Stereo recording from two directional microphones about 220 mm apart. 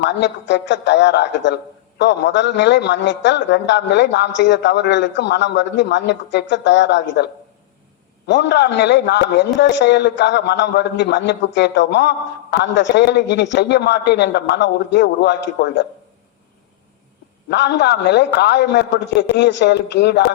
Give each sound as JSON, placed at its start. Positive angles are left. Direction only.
{"t": 0.0, "sound": "a man's voice", "side_deg": 55}
{"t": 8.3, "sound": "a man's voice", "side_deg": 50}
{"t": 17.5, "sound": "a man's voice", "side_deg": 55}